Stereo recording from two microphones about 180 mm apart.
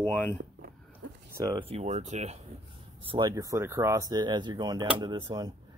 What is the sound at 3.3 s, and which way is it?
Speech, 15° right (ahead or behind).